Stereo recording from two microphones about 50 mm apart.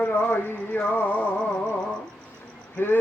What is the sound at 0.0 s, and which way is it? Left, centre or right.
Music, left.